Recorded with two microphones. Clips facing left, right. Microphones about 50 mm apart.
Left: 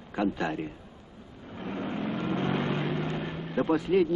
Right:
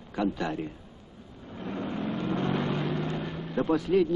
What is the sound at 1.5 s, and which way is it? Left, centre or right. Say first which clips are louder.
Vehicle: even; centre.